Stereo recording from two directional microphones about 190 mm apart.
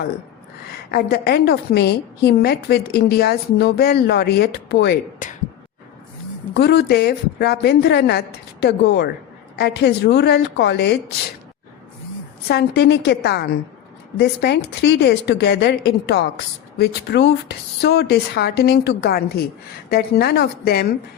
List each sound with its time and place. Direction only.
0.9 s a woman's voice: 55° left (ahead or behind)
5.2 s speech: 45° left (ahead or behind)
6.5 s a woman's voice: 60° left (ahead or behind)
12.5 s a woman's voice: 60° left (ahead or behind)